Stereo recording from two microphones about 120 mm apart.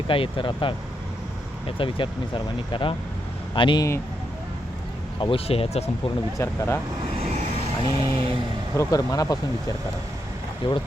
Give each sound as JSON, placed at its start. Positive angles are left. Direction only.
{"t": 0.1, "sound": "speech", "side_deg": 45}
{"t": 5.2, "sound": "speech", "side_deg": 50}
{"t": 6.3, "sound": "speech", "side_deg": 25}
{"t": 7.9, "sound": "vehicle", "side_deg": -35}
{"t": 8.7, "sound": "speech", "side_deg": 25}
{"t": 10.6, "sound": "speech", "side_deg": 45}